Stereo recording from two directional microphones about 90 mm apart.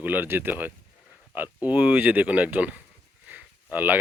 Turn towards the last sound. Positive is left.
turn(degrees=-20)  # may be behind; listen again after turning